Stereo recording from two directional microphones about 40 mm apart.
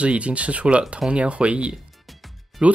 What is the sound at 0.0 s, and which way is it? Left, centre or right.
Speech, right.